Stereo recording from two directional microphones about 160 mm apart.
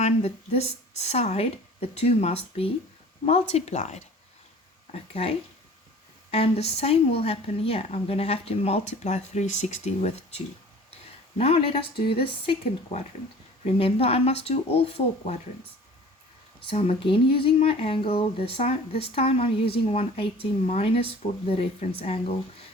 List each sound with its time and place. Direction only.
0.0 s a woman's voice: 40° left (ahead or behind)
6.3 s a woman's voice: 40° left (ahead or behind)
16.6 s a woman's voice: 35° left (ahead or behind)